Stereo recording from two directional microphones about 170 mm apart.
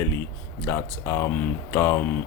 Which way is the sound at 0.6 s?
15° left (ahead or behind).